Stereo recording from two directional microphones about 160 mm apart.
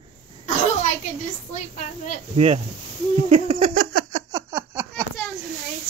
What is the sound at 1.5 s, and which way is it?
Speech, 50° left (ahead or behind).